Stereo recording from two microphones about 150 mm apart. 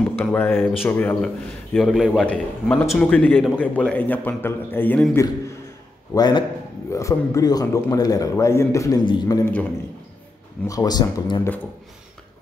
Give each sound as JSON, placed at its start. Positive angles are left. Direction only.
{"t": 0.0, "sound": "a man's voice", "side_deg": 10}
{"t": 6.1, "sound": "a man's voice", "side_deg": 30}
{"t": 9.0, "sound": "a man's voice", "side_deg": 35}
{"t": 9.4, "sound": "a man's voice", "side_deg": 10}
{"t": 10.7, "sound": "a man's voice", "side_deg": 25}